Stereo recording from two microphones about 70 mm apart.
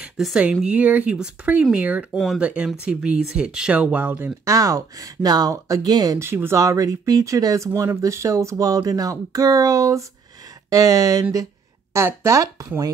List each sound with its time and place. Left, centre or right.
0.2 s speech: centre
2.1 s speech: centre
2.4 s speech: centre
3.7 s speech: right
4.5 s speech: right
5.9 s speech: right
6.1 s speech: right
6.6 s speech: right